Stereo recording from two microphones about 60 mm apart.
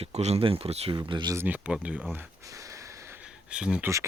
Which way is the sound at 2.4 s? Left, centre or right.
Right.